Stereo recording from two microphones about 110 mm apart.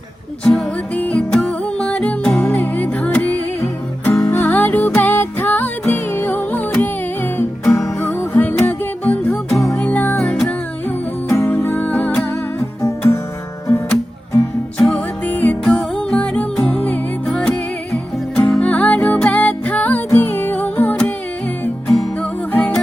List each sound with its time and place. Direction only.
0.4 s music: 5° left (ahead or behind)
2.4 s music: 15° left (ahead or behind)
9.5 s music: 25° left (ahead or behind)
9.7 s music: 15° left (ahead or behind)
14.3 s music: 20° left (ahead or behind)
21.8 s music: centre (ahead or behind)
22.2 s music: 10° left (ahead or behind)